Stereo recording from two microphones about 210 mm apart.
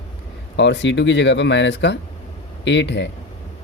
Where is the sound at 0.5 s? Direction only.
60° left (ahead or behind).